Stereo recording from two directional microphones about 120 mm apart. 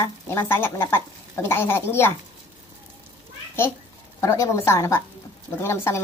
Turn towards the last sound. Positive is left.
turn(degrees=25)  # may be behind; listen again after turning